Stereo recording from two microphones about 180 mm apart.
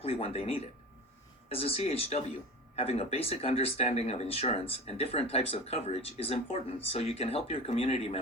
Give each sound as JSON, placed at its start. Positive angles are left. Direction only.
{"t": 0.0, "sound": "speech", "side_deg": 35}